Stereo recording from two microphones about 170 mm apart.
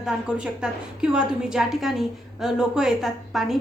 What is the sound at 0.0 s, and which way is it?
A woman's voice, 5° right (ahead or behind).